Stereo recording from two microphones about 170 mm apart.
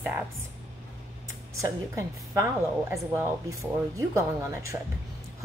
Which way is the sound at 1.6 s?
20° right (ahead or behind).